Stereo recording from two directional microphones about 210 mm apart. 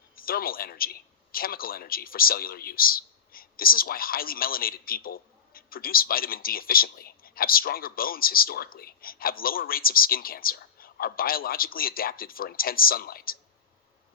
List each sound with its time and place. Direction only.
0.2 s a man's voice: 45° left (ahead or behind)